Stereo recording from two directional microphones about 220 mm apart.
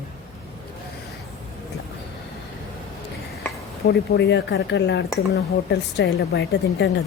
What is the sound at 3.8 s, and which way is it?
Speech, 50° left (ahead or behind).